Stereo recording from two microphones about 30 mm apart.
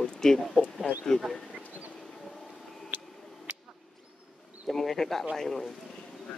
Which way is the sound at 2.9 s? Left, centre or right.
Right.